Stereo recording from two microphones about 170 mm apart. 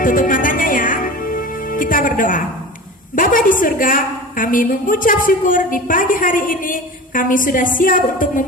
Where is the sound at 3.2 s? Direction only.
55° left (ahead or behind).